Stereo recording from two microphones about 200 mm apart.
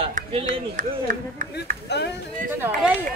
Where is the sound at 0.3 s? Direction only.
35° right (ahead or behind).